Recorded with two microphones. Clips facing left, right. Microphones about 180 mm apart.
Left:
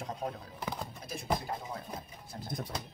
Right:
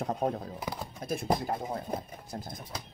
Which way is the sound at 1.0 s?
55° right (ahead or behind).